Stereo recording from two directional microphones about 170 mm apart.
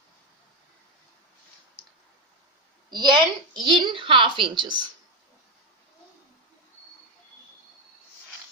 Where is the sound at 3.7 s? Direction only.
30° right (ahead or behind).